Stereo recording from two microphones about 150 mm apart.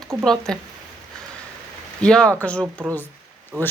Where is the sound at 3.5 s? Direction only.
20° right (ahead or behind).